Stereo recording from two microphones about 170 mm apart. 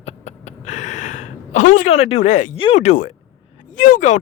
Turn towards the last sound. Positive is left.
turn(degrees=45)  # may be behind; listen again after turning